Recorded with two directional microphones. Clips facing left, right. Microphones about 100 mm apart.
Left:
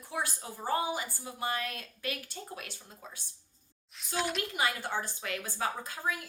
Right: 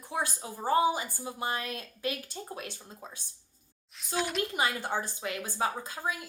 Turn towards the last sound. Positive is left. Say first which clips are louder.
# right 1 dB
turn(degrees=-20)  # may be behind; listen again after turning